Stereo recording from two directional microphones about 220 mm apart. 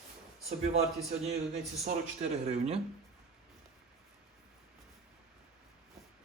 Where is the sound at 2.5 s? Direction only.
30° right (ahead or behind).